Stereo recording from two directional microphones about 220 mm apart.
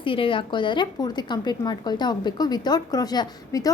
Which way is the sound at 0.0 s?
25° left (ahead or behind).